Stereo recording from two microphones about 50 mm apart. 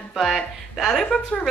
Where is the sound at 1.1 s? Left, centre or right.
Left.